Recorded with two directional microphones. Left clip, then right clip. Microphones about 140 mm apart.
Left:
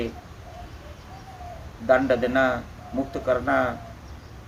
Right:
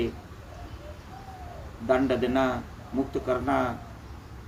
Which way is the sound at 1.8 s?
20° left (ahead or behind).